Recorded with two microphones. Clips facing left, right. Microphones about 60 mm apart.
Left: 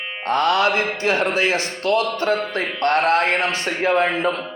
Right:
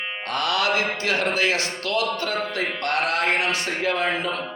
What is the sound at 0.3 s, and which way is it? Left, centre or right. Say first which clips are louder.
Speech: left 6 dB; left.